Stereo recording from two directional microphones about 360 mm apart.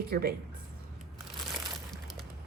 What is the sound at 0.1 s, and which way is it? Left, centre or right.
Speech, right.